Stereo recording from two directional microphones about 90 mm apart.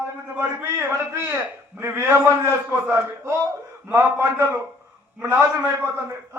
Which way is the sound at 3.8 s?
25° right (ahead or behind).